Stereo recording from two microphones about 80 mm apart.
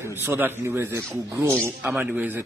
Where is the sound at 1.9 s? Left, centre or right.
Centre.